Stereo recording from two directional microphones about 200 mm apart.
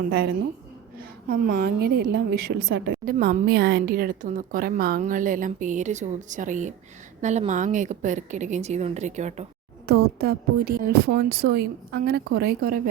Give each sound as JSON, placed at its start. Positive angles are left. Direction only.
{"t": 0.1, "sound": "a woman's voice", "side_deg": -55}
{"t": 10.2, "sound": "a woman's voice", "side_deg": -50}